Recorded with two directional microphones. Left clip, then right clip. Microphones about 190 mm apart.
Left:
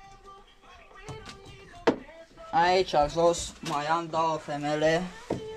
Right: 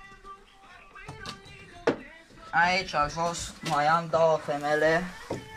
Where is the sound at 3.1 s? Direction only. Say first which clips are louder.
Left 6 dB; 20° left (ahead or behind).